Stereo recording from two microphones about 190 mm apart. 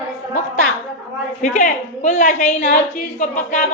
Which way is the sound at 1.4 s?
40° left (ahead or behind).